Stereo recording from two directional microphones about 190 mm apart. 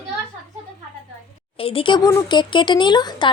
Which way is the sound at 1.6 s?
30° left (ahead or behind).